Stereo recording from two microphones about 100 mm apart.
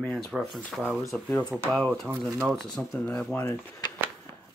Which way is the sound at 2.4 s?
5° left (ahead or behind).